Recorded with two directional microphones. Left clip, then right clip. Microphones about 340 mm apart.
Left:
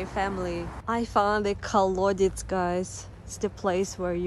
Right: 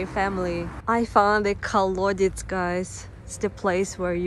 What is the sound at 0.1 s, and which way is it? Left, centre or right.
A woman's voice, centre.